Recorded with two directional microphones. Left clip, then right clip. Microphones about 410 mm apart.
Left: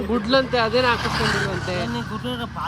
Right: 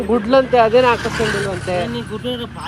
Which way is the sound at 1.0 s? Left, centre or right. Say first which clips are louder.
Right 3 dB; centre.